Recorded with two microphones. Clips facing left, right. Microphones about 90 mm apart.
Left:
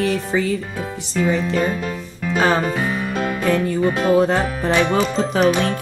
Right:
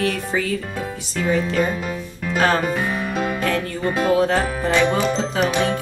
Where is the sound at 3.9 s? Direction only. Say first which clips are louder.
Left 1 dB; centre (ahead or behind).